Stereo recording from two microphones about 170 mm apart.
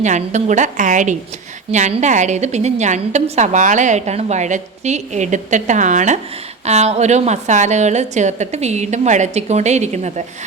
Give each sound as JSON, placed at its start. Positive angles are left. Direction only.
{"t": 0.0, "sound": "a woman's voice", "side_deg": -45}